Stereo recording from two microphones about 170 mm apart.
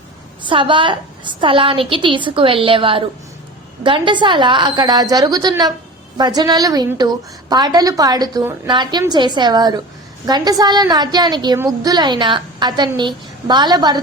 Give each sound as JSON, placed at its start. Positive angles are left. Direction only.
{"t": 0.4, "sound": "a woman's voice", "side_deg": -30}